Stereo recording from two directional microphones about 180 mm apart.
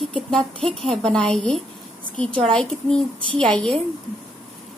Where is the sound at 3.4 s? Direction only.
5° left (ahead or behind).